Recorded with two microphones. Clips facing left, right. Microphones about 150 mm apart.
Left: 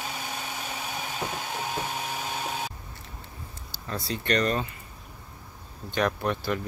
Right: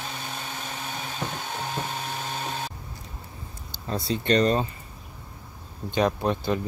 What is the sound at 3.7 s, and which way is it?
Speech, 25° right (ahead or behind).